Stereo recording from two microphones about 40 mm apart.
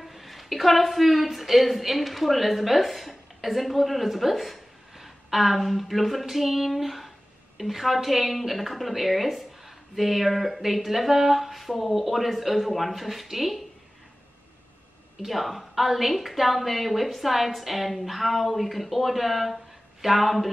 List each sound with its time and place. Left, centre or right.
0.0 s a woman's voice: centre
15.1 s a woman's voice: centre